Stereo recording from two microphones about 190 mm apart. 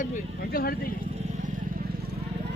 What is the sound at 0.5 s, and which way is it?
Speech, 50° left (ahead or behind).